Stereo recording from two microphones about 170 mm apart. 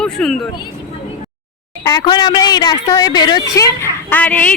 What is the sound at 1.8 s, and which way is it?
A woman's voice, 25° left (ahead or behind).